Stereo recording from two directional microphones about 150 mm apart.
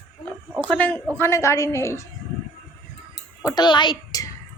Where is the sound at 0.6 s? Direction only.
10° left (ahead or behind).